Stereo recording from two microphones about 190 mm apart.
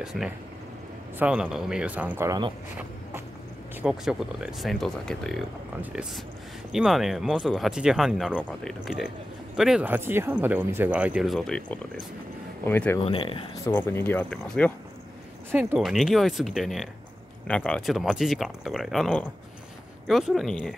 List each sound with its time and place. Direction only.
0.0 s speech: centre (ahead or behind); by 2.5 s 20° right (ahead or behind)
3.8 s speech: centre (ahead or behind)
13.0 s speech: 30° left (ahead or behind)
13.7 s speech: 10° left (ahead or behind)
15.5 s speech: 5° right (ahead or behind)